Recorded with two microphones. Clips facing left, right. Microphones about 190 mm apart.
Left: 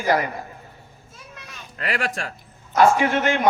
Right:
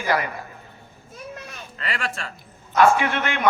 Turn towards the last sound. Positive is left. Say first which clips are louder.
# left 4 dB
turn(degrees=40)  # may be behind; listen again after turning